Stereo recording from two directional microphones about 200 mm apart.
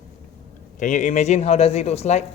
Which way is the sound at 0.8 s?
35° left (ahead or behind).